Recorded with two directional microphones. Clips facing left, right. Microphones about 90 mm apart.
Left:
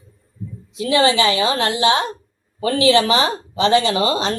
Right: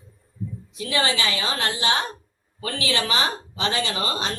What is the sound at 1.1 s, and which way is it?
Speech, 35° left (ahead or behind).